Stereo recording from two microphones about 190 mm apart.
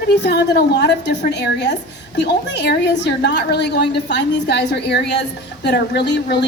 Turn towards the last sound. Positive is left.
turn(degrees=65)  # may be behind; listen again after turning